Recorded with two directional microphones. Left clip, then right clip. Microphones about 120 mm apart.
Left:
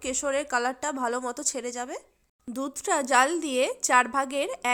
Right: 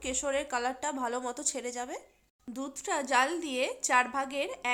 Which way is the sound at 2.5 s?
45° left (ahead or behind).